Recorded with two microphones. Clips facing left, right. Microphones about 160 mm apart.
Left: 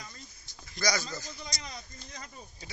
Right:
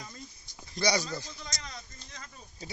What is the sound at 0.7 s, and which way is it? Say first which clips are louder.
Speech: right 3 dB; 30° right (ahead or behind).